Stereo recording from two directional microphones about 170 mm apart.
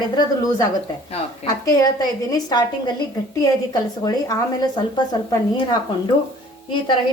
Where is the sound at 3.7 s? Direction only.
20° left (ahead or behind).